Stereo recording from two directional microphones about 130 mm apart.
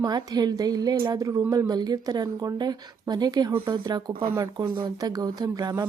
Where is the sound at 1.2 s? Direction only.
25° right (ahead or behind).